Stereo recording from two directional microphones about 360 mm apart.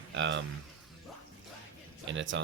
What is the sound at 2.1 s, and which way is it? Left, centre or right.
Speech, right.